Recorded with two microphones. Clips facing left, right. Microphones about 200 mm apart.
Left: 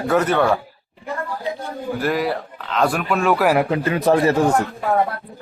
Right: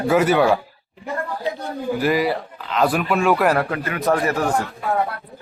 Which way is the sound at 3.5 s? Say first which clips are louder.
Left 4 dB; 20° left (ahead or behind).